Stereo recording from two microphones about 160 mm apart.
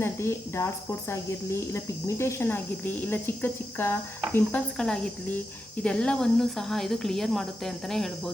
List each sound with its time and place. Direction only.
0.0 s speech: 15° left (ahead or behind)